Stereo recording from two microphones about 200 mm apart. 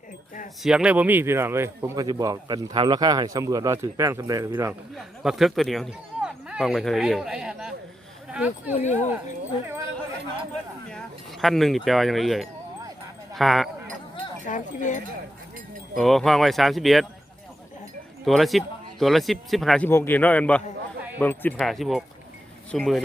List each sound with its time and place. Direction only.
0.6 s speech: 5° right (ahead or behind)
4.9 s speech: centre (ahead or behind)
8.7 s speech: 35° left (ahead or behind)
10.8 s speech: centre (ahead or behind)
14.4 s speech: 40° left (ahead or behind)
16.0 s speech: centre (ahead or behind)
18.3 s speech: centre (ahead or behind)